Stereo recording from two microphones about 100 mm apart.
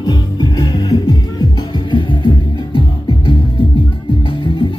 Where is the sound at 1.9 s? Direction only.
55° left (ahead or behind).